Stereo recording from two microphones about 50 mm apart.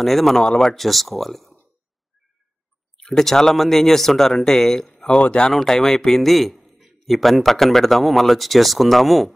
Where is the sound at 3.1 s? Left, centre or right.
Centre.